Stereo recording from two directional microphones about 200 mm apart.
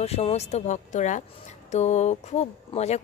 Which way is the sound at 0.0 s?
30° left (ahead or behind).